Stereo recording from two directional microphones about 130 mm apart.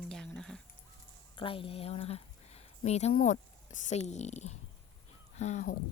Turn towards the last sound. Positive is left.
turn(degrees=70)  # may be behind; listen again after turning